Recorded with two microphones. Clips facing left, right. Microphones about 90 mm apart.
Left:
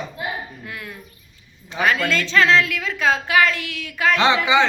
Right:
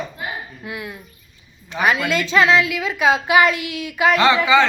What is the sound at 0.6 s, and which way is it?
A woman's voice, 15° right (ahead or behind).